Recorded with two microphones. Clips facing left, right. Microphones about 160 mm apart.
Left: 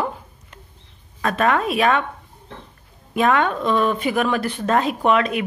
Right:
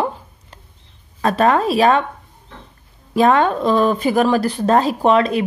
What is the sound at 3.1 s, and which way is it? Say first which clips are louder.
Speech: right 4 dB; 35° right (ahead or behind).